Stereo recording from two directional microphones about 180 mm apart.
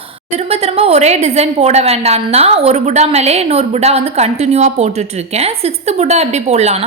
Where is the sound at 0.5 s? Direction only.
35° right (ahead or behind).